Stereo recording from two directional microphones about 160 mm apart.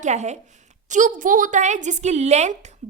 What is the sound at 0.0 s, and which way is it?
A woman's voice, 45° right (ahead or behind).